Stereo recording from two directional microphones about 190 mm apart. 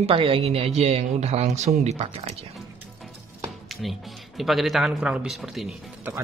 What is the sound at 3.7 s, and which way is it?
Speech, centre (ahead or behind).